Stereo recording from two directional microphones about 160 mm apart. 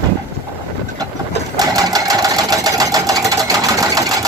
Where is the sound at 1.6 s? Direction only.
20° right (ahead or behind).